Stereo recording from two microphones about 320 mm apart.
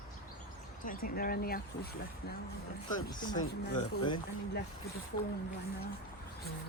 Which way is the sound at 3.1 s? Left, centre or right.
Centre.